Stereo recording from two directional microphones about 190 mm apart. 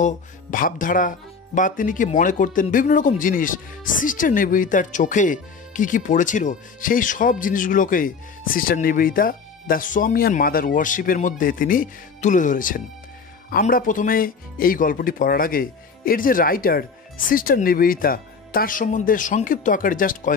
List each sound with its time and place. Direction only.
0.0 s speech: 45° left (ahead or behind)